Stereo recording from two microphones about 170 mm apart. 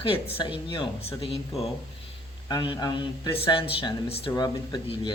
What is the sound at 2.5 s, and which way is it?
Speech, 25° left (ahead or behind).